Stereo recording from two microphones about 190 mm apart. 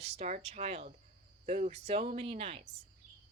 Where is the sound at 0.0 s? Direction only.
35° right (ahead or behind).